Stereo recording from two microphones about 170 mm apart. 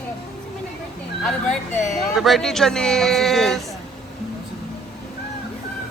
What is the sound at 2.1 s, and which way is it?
Speech, centre (ahead or behind).